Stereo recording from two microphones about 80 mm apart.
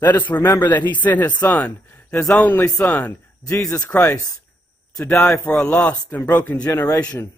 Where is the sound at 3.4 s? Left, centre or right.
Left.